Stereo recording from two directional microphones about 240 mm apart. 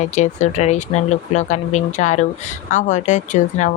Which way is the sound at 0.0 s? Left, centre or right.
Left.